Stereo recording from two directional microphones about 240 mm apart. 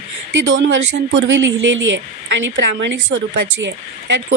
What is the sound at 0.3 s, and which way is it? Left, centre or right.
Speech, right.